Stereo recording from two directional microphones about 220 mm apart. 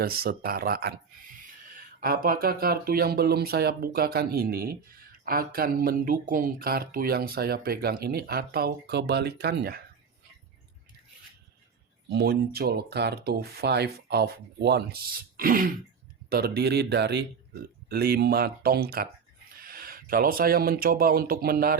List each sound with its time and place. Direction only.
0.0 s speech: 45° right (ahead or behind)
12.1 s speech: 45° right (ahead or behind)